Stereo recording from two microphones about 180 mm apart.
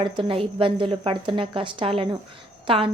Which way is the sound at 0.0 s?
30° right (ahead or behind).